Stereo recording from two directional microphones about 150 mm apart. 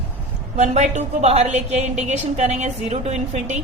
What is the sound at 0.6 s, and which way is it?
A woman's voice, 50° right (ahead or behind).